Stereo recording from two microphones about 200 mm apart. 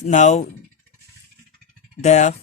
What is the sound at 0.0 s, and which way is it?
Speech, 35° left (ahead or behind).